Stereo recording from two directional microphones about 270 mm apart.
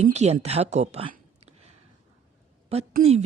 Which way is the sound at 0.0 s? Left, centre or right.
Right.